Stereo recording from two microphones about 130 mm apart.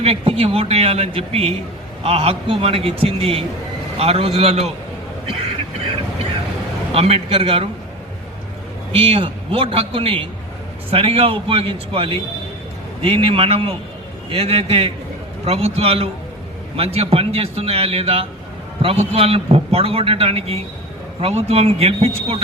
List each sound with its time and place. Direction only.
0.0 s a man's voice: 50° right (ahead or behind)
6.9 s a man's voice: 50° right (ahead or behind)
8.9 s a man's voice: 45° right (ahead or behind)